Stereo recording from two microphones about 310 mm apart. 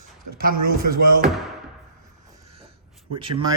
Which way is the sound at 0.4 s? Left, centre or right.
Right.